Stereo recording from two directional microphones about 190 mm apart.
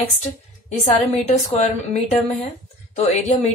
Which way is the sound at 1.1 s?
35° left (ahead or behind).